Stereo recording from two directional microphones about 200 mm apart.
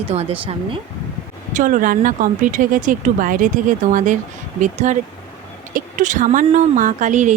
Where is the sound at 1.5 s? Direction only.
40° right (ahead or behind).